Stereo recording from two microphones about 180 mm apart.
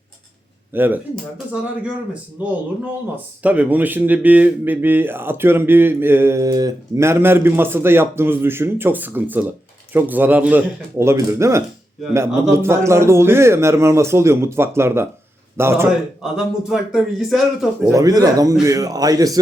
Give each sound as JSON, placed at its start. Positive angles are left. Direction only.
{"t": 0.7, "sound": "speech", "side_deg": -10}
{"t": 3.4, "sound": "speech", "side_deg": -10}
{"t": 16.2, "sound": "speech", "side_deg": -5}
{"t": 17.8, "sound": "speech", "side_deg": -20}